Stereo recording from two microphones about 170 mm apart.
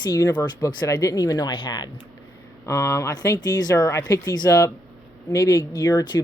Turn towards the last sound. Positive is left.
turn(degrees=25)  # may be behind; listen again after turning